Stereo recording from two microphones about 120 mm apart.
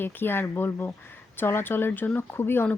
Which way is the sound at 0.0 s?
15° left (ahead or behind).